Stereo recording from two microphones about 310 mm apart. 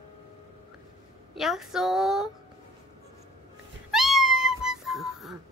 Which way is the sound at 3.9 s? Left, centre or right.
Centre.